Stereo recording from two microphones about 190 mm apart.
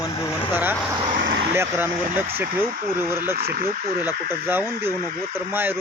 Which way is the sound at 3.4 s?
55° right (ahead or behind).